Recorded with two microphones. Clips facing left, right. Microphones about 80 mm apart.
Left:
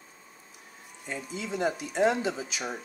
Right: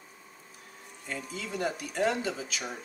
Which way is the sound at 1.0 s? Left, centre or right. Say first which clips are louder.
Left 2 dB; centre.